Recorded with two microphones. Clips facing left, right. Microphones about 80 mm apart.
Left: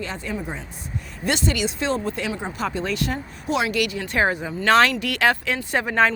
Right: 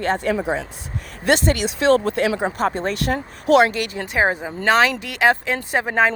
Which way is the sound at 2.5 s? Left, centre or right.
Right.